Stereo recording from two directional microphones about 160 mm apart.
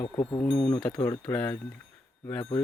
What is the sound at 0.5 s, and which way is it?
Speech, 5° left (ahead or behind).